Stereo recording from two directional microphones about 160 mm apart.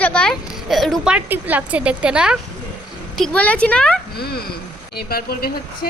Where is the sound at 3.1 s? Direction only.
5° left (ahead or behind).